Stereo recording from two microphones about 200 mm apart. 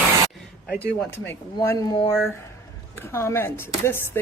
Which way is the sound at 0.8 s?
5° left (ahead or behind).